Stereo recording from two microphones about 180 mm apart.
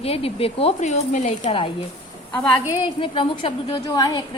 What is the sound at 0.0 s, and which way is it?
Speech, 35° left (ahead or behind).